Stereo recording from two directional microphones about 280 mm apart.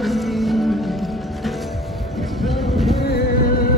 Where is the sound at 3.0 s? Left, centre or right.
Left.